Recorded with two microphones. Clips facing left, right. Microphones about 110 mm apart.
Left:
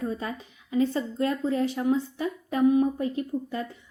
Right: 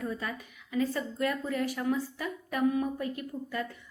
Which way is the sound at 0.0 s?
25° left (ahead or behind).